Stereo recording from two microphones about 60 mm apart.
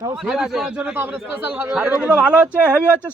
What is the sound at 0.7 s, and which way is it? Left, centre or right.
Speech, right.